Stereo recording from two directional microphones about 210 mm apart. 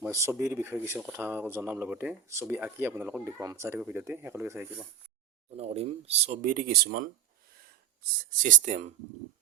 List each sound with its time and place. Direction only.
0.0 s speech: 15° right (ahead or behind)
5.5 s speech: 30° right (ahead or behind); by 7.1 s 45° right (ahead or behind)
8.2 s speech: 40° right (ahead or behind)